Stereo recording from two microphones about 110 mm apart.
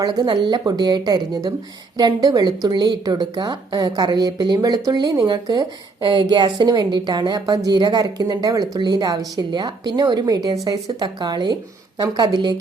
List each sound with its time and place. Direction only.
0.0 s a woman's voice: 40° right (ahead or behind)